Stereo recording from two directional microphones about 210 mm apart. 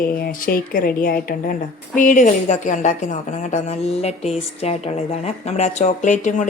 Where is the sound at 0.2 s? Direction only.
45° left (ahead or behind).